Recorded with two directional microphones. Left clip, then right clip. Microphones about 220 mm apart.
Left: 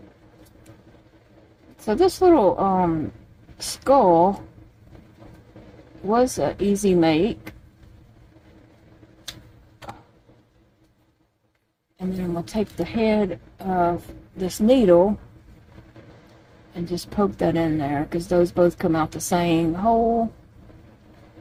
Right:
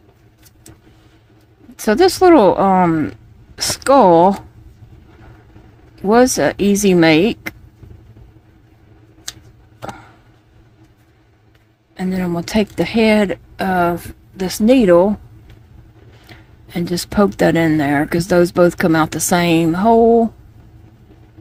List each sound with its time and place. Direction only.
1.7 s speech: 30° right (ahead or behind)
6.1 s speech: 30° right (ahead or behind)
12.1 s speech: 30° right (ahead or behind)
16.8 s speech: 30° right (ahead or behind)